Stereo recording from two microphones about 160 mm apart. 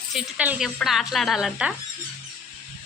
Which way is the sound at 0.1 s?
5° right (ahead or behind).